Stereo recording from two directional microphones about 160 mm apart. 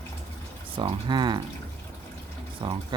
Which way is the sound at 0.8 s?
30° right (ahead or behind).